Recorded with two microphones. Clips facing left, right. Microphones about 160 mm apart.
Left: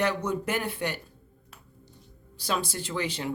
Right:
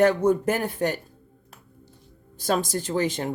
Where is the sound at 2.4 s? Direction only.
45° right (ahead or behind).